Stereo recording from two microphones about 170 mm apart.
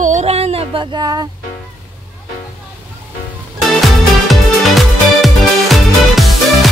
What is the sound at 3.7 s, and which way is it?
Music, centre (ahead or behind).